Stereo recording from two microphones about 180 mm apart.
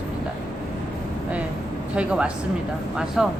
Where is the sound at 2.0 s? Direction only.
5° right (ahead or behind).